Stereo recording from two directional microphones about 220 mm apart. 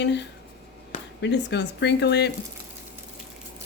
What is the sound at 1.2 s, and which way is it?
Speech, 50° left (ahead or behind).